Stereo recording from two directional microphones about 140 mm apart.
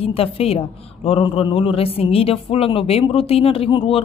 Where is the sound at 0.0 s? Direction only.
45° left (ahead or behind).